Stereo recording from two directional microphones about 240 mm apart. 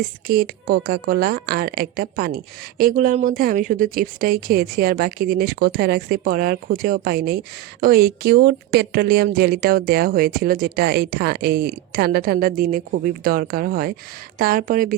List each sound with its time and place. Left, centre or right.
0.3 s speech: right